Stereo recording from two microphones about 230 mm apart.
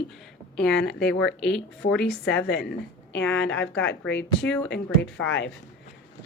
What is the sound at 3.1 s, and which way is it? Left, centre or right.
A woman's voice, left.